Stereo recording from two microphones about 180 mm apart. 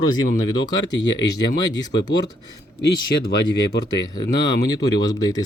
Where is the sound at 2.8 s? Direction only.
65° left (ahead or behind).